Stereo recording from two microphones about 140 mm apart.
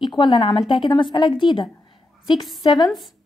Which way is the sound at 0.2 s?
35° left (ahead or behind).